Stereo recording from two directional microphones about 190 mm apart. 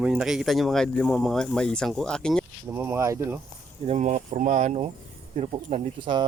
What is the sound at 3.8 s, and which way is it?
Speech, 35° right (ahead or behind).